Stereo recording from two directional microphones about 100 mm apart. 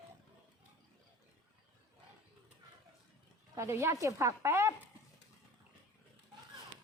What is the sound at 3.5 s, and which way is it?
Speech, 25° right (ahead or behind).